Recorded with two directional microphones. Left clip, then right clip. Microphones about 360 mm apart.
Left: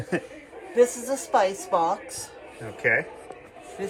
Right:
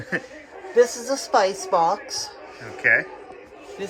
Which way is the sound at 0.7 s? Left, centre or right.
Right.